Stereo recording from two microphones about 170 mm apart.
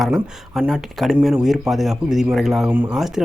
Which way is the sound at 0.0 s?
Centre (ahead or behind).